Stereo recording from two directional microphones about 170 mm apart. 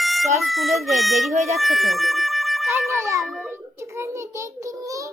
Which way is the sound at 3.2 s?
Centre (ahead or behind).